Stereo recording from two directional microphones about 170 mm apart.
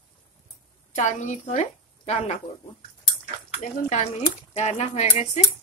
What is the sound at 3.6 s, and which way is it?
Speech, 45° left (ahead or behind).